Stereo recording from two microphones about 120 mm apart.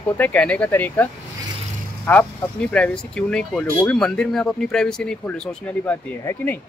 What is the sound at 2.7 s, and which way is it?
A man's voice, 10° left (ahead or behind).